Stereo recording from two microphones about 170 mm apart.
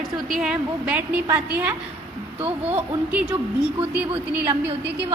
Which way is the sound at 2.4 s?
35° right (ahead or behind).